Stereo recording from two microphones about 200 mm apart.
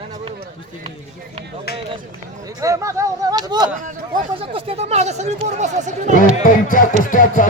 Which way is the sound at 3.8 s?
40° right (ahead or behind).